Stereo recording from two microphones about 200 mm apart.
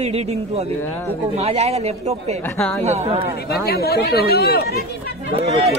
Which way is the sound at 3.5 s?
50° left (ahead or behind).